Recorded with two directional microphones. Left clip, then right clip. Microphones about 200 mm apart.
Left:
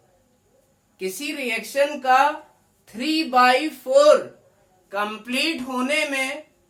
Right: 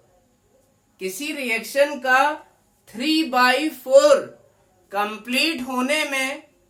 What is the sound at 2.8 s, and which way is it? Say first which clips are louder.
A woman's voice: right 2 dB; 15° right (ahead or behind).